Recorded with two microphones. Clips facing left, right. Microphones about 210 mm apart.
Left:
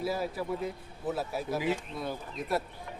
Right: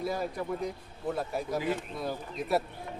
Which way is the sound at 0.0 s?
5° left (ahead or behind).